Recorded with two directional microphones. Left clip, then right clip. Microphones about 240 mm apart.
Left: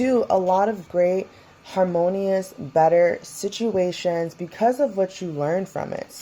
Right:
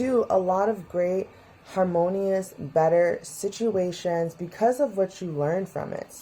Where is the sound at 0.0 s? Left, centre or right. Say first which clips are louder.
Left 3 dB; left.